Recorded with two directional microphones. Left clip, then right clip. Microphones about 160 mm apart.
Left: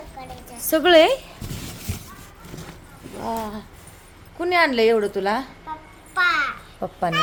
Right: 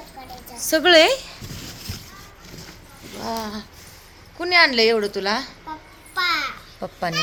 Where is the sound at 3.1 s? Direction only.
5° left (ahead or behind).